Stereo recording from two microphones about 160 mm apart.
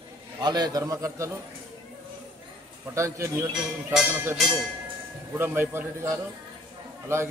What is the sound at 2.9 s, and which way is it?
Speech, 15° right (ahead or behind).